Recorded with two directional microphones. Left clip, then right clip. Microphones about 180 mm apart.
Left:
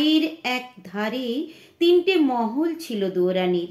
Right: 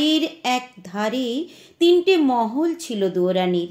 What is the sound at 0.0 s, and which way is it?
A woman's voice, 40° right (ahead or behind).